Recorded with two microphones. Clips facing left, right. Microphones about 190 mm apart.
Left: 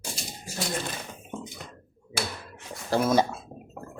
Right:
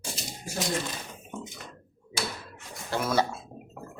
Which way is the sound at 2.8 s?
35° left (ahead or behind).